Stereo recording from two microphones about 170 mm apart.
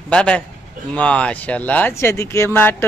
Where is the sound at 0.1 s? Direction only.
5° left (ahead or behind).